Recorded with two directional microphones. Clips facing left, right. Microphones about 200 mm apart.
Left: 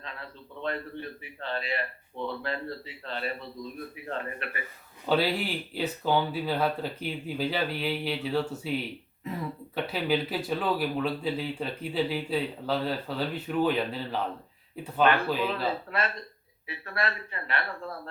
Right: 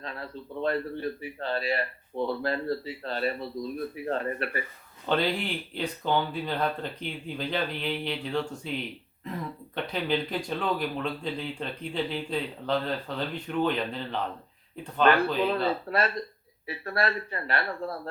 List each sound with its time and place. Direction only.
0.0 s a man's voice: 40° right (ahead or behind)
5.0 s speech: 5° left (ahead or behind)
9.7 s speech: 5° left (ahead or behind)
15.9 s a man's voice: 40° right (ahead or behind)